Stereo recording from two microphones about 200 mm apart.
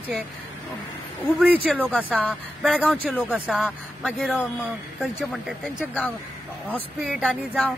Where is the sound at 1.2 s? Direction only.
5° right (ahead or behind).